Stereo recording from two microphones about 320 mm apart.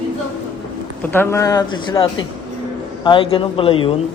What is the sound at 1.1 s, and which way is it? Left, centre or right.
Speech, centre.